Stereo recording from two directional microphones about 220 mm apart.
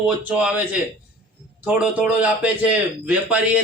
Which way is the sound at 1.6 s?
5° right (ahead or behind).